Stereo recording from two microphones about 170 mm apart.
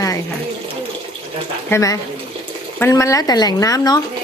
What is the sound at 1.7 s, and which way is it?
Speech, 20° left (ahead or behind).